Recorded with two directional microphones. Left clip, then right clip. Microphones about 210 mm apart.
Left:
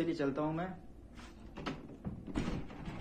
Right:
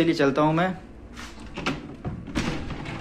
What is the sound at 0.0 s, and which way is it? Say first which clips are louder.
Speech: right 14 dB; 15° right (ahead or behind).